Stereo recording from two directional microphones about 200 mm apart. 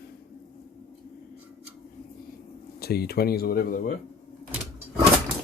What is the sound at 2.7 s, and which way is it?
Speech, 50° left (ahead or behind).